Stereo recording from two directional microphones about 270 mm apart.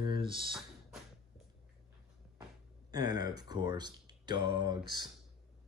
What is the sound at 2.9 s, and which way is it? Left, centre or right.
Speech, centre.